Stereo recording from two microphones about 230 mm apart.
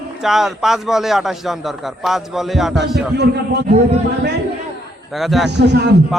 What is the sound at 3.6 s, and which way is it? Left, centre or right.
Speech, right.